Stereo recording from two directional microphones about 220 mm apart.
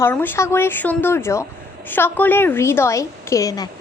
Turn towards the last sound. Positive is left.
turn(degrees=15)  # may be behind; listen again after turning